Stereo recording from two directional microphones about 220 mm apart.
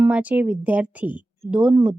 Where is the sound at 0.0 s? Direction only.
5° right (ahead or behind).